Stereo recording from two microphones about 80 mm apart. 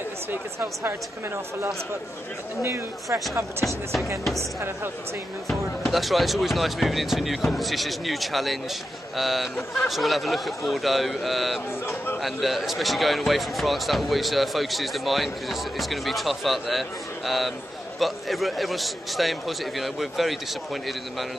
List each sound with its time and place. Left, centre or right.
0.3 s speech: right
3.6 s speech: centre
4.4 s speech: right
5.5 s speech: centre
11.8 s speech: left
12.2 s speech: centre